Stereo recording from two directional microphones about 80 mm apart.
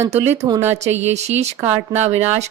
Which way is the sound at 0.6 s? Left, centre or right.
Right.